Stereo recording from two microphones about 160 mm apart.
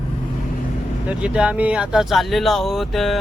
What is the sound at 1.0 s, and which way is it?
Speech, 5° right (ahead or behind).